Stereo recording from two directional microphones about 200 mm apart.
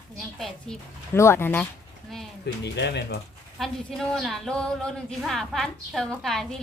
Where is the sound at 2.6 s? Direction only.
60° left (ahead or behind).